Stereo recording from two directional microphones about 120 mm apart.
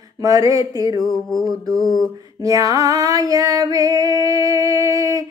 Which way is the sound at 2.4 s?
30° right (ahead or behind).